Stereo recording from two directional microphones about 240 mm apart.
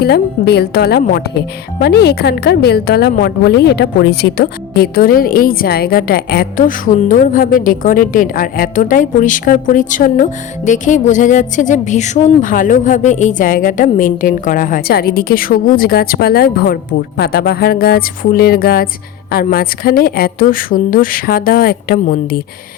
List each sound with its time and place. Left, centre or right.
0.0 s a woman's voice: left